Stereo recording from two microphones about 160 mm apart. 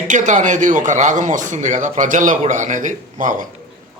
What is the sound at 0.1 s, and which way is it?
A man's voice, 50° right (ahead or behind).